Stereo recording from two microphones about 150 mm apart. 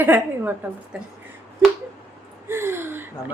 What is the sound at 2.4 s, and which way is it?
Gasp, 15° right (ahead or behind).